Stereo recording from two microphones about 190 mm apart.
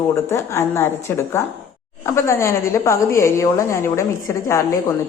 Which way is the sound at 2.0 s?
15° left (ahead or behind).